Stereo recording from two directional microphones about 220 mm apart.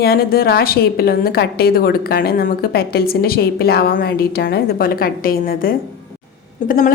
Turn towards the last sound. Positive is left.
turn(degrees=40)  # may be behind; listen again after turning